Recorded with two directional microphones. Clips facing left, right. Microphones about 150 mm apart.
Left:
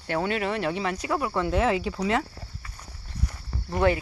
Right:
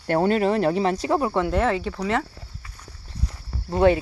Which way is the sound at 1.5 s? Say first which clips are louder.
Right 1 dB; 5° left (ahead or behind).